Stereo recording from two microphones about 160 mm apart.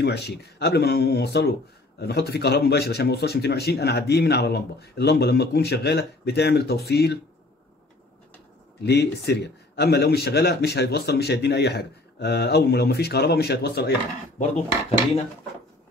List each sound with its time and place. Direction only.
0.0 s a man's voice: 90° left
8.8 s a man's voice: 90° left